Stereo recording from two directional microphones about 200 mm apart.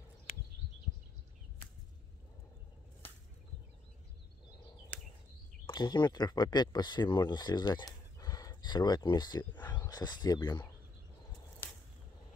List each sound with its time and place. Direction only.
5.7 s speech: 20° left (ahead or behind)